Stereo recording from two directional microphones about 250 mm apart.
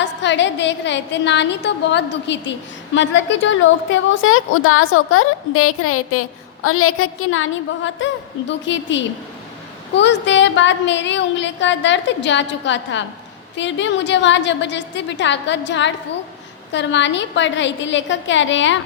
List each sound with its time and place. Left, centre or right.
0.0 s a woman's voice: left